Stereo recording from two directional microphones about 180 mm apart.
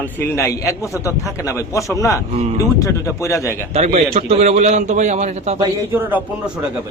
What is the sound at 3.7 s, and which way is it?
A man's voice, 35° right (ahead or behind).